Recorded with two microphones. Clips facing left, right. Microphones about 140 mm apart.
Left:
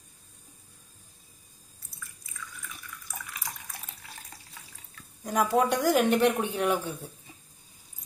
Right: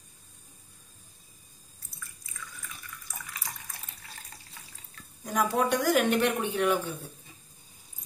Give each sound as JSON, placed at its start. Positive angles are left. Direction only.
{"t": 5.2, "sound": "a woman's voice", "side_deg": 25}